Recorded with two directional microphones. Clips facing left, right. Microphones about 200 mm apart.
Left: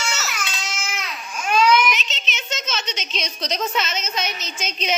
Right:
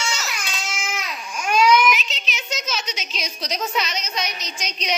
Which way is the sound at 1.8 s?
Centre (ahead or behind).